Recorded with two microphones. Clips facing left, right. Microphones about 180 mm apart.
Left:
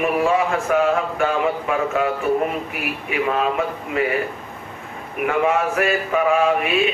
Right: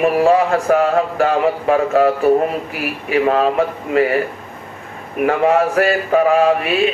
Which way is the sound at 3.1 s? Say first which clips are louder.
Right 7 dB; 35° right (ahead or behind).